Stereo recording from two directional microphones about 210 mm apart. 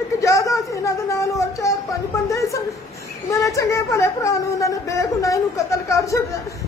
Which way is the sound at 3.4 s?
15° left (ahead or behind).